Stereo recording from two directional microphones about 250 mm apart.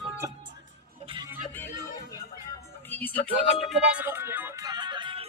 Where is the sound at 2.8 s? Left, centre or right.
Centre.